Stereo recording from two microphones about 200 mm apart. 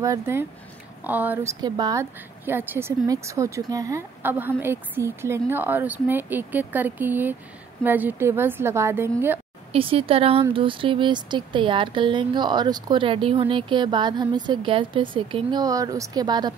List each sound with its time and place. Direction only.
0.0 s speech: 15° right (ahead or behind)
9.7 s speech: 30° right (ahead or behind)